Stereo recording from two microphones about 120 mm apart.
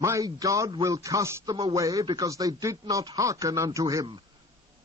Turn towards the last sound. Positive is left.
turn(degrees=-25)  # may be behind; listen again after turning